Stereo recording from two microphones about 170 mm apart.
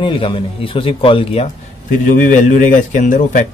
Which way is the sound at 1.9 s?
50° left (ahead or behind).